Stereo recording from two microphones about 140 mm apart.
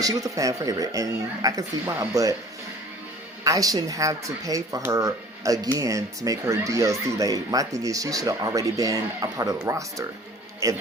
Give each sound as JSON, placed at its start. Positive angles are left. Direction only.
{"t": 0.0, "sound": "speech", "side_deg": -25}
{"t": 3.4, "sound": "speech", "side_deg": -25}